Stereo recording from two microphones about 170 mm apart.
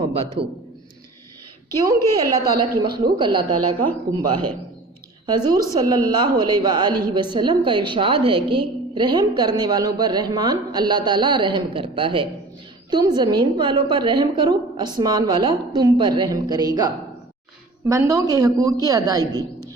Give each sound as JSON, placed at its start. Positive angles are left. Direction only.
{"t": 0.4, "sound": "a man's voice", "side_deg": -35}
{"t": 2.6, "sound": "a woman's voice", "side_deg": -25}